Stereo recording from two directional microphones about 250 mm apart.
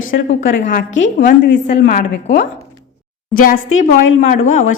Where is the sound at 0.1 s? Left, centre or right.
Left.